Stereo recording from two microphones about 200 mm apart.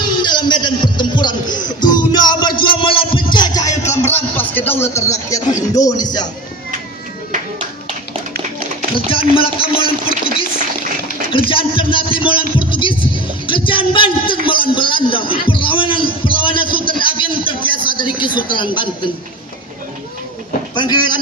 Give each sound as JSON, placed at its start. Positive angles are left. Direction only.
{"t": 0.1, "sound": "music", "side_deg": 20}
{"t": 4.1, "sound": "a sound", "side_deg": 10}
{"t": 5.7, "sound": "speech", "side_deg": 15}
{"t": 9.3, "sound": "a man's voice", "side_deg": 25}
{"t": 11.3, "sound": "a man's voice", "side_deg": 25}
{"t": 12.2, "sound": "music", "side_deg": 25}
{"t": 17.0, "sound": "a man's voice", "side_deg": 25}
{"t": 20.7, "sound": "a man's voice", "side_deg": 20}